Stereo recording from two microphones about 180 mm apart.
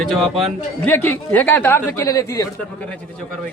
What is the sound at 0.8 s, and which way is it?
Speech, 10° left (ahead or behind).